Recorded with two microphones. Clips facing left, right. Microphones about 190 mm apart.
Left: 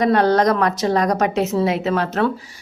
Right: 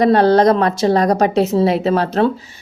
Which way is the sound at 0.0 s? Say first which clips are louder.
Right 4 dB; 30° right (ahead or behind).